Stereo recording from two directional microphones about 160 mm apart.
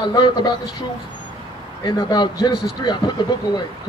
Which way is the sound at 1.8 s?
25° left (ahead or behind).